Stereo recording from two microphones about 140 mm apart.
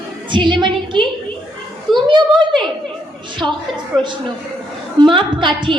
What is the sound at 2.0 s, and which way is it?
A woman's voice, 35° right (ahead or behind).